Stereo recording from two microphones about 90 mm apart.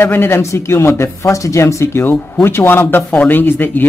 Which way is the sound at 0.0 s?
25° left (ahead or behind).